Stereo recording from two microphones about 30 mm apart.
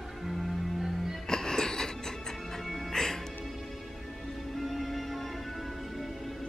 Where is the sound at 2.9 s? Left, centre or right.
Centre.